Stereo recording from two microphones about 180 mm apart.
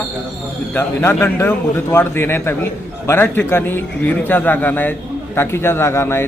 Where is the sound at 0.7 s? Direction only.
10° left (ahead or behind).